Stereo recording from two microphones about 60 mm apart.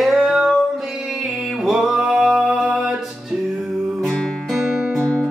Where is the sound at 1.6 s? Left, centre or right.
Centre.